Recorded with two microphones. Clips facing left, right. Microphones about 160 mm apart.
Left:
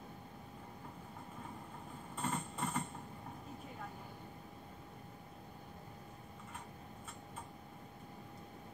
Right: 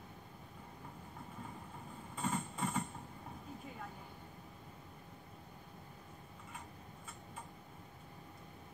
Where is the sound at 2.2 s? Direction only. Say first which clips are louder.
Right 1 dB; centre (ahead or behind).